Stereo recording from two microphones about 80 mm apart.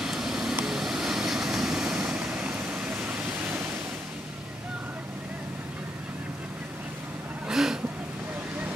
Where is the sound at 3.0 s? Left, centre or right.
Centre.